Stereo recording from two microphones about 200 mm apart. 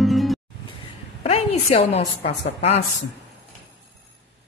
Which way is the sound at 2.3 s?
30° left (ahead or behind).